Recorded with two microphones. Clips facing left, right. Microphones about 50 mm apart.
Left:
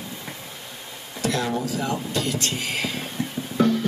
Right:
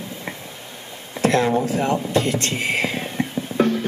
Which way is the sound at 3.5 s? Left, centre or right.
Right.